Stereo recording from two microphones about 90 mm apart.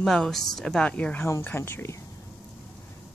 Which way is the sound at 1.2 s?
25° left (ahead or behind).